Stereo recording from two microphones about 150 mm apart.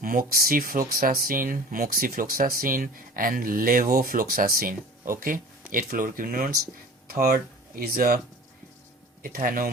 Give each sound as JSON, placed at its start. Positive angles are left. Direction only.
{"t": 0.0, "sound": "speech", "side_deg": -70}
{"t": 9.2, "sound": "speech", "side_deg": -70}